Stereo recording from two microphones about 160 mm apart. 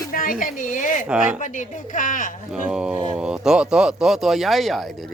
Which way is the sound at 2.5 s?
5° right (ahead or behind).